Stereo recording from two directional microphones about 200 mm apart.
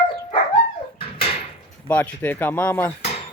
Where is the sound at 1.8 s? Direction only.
10° left (ahead or behind).